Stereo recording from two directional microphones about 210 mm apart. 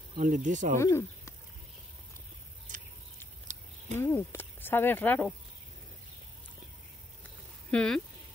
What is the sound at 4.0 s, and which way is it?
Speech, 10° left (ahead or behind).